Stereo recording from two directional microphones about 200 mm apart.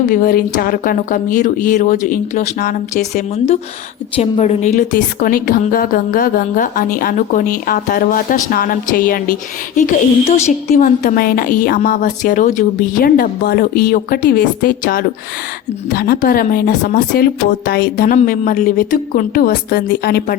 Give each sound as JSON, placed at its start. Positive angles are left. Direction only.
{"t": 0.0, "sound": "a woman's voice", "side_deg": 45}